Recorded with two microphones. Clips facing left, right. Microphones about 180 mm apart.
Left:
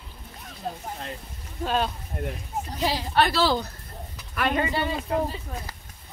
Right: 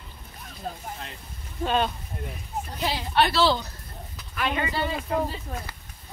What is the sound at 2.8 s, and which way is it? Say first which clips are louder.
Speech: left 1 dB; 40° left (ahead or behind).